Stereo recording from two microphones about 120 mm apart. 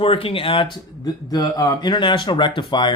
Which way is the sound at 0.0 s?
50° left (ahead or behind).